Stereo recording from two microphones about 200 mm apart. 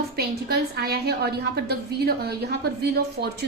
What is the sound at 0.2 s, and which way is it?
A woman's voice, 50° right (ahead or behind).